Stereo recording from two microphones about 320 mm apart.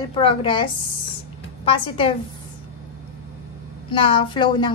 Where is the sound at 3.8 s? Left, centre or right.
Centre.